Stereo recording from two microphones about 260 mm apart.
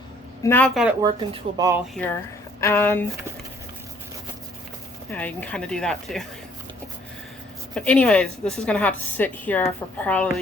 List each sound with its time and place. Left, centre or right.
0.4 s a woman's voice: centre
1.0 s speech: centre
2.6 s speech: centre
5.1 s a woman's voice: centre
7.8 s a woman's voice: centre